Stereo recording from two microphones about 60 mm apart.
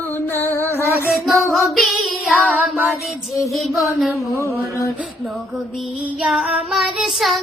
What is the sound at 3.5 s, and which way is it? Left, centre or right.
Child singing, centre.